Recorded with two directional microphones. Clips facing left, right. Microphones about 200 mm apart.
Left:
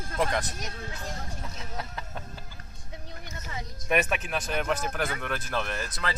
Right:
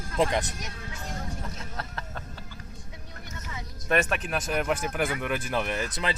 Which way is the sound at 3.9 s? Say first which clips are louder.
Right 1 dB; 5° left (ahead or behind).